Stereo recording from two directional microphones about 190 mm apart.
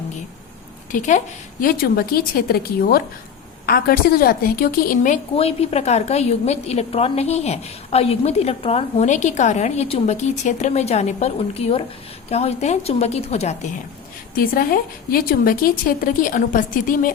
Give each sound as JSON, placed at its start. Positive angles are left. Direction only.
{"t": 0.9, "sound": "a woman's voice", "side_deg": 40}
{"t": 1.6, "sound": "a woman's voice", "side_deg": 50}
{"t": 5.3, "sound": "a woman's voice", "side_deg": 30}
{"t": 14.3, "sound": "a woman's voice", "side_deg": 50}